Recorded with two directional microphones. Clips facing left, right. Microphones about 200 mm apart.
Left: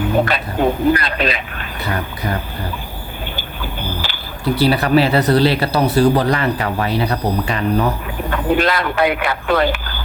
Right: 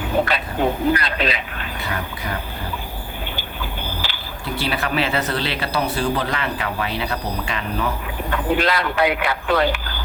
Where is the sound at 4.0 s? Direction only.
45° left (ahead or behind).